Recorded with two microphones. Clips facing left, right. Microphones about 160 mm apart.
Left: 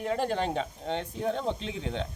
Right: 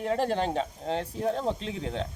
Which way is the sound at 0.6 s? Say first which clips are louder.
Right 2 dB; 35° right (ahead or behind).